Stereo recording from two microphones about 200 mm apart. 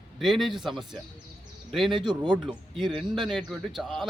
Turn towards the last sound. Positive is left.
turn(degrees=0)  # may be behind; listen again after turning